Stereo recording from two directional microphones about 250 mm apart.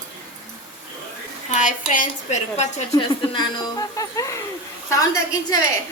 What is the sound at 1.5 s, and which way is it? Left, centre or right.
A woman's voice, left.